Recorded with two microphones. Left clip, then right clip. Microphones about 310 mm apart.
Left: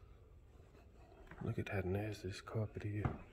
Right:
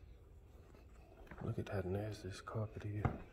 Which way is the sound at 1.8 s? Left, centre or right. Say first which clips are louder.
Left 1 dB; centre.